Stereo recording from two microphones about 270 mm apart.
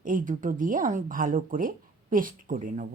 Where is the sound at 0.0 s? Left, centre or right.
Right.